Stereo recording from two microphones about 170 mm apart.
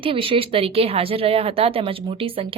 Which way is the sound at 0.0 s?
30° right (ahead or behind).